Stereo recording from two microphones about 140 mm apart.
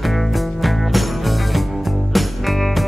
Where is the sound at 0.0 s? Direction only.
Centre (ahead or behind).